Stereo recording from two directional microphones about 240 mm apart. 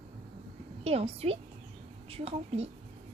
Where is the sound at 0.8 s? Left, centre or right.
Right.